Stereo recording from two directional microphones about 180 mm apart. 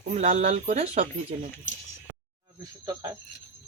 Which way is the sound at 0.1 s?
40° right (ahead or behind).